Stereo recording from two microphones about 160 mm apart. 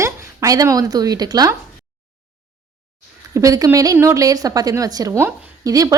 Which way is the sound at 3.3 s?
20° right (ahead or behind).